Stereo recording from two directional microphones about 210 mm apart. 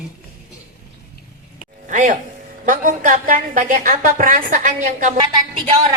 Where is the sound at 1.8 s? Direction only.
40° right (ahead or behind).